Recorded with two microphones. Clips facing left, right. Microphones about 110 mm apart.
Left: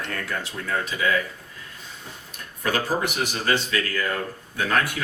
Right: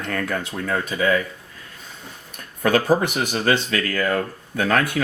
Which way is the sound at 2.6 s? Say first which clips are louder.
Right 6 dB; 45° right (ahead or behind).